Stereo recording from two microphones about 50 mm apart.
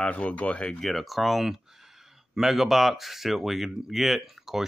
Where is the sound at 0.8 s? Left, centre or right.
Centre.